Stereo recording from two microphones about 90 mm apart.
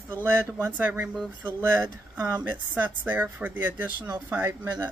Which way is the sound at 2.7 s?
20° right (ahead or behind).